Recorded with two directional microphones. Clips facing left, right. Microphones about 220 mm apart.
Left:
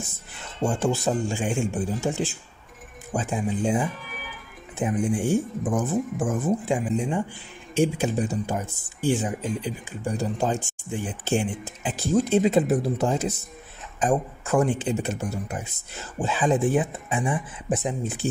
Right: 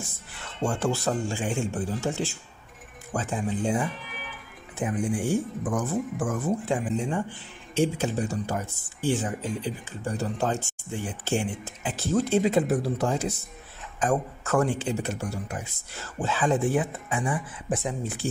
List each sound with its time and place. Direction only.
0.7 s speech: 15° left (ahead or behind)